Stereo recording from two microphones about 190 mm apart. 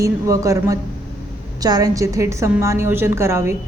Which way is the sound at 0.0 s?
15° right (ahead or behind).